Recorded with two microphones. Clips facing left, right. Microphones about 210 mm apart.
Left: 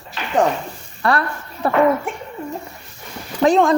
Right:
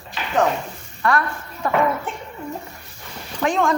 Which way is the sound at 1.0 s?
35° left (ahead or behind).